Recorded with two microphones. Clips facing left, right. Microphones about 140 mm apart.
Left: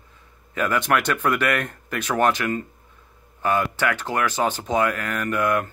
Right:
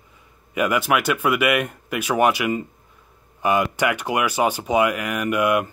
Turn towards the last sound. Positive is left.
turn(degrees=-15)  # may be behind; listen again after turning